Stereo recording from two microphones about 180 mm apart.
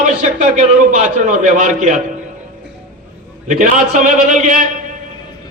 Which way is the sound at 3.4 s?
45° right (ahead or behind).